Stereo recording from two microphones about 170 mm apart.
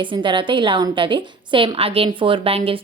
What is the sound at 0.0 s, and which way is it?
A woman's voice, 30° right (ahead or behind).